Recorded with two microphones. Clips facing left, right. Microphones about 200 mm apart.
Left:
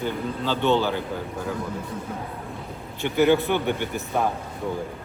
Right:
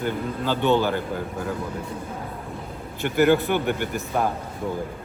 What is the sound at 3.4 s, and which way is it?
Speech, 10° right (ahead or behind).